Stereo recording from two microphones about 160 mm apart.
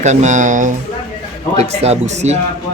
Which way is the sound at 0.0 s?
45° right (ahead or behind).